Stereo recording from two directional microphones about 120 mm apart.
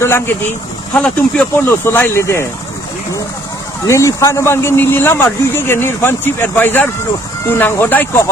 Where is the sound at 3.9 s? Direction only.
25° left (ahead or behind).